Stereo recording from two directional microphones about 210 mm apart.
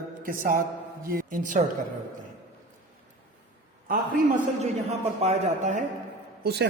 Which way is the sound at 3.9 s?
40° right (ahead or behind).